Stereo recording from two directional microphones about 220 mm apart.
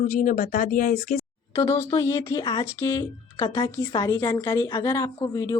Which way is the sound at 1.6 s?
15° left (ahead or behind).